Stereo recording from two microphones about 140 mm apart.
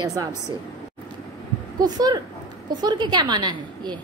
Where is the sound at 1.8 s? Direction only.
25° right (ahead or behind).